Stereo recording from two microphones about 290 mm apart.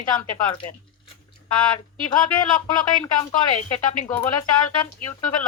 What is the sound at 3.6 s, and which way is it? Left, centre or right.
Speech, left.